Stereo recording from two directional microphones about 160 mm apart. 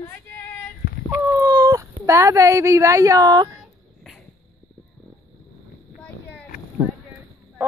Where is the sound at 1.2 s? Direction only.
15° right (ahead or behind).